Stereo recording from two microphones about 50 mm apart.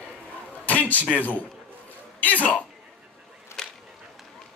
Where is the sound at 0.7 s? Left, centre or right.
Left.